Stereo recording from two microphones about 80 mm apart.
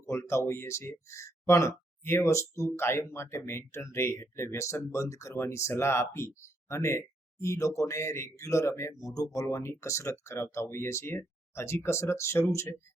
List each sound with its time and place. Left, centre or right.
0.0 s speech: left